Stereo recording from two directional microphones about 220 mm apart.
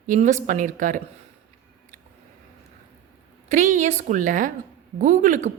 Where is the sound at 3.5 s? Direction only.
35° right (ahead or behind).